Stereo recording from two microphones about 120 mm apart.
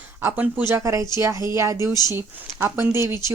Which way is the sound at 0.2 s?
15° right (ahead or behind).